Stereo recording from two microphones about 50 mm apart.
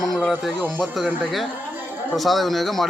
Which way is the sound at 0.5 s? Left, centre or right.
Right.